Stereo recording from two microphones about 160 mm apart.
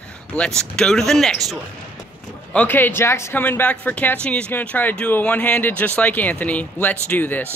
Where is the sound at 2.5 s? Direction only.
10° left (ahead or behind).